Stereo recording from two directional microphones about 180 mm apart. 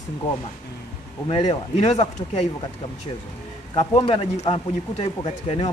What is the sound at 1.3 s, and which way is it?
Speech, 25° left (ahead or behind).